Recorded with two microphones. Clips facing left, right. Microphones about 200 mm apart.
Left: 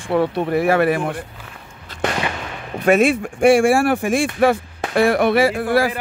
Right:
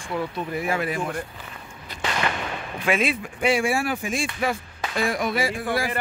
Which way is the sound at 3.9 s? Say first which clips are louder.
Left 9 dB; 55° left (ahead or behind).